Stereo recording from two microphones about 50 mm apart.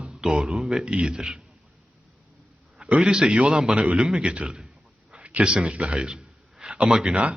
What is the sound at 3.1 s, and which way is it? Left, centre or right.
A man's voice, centre.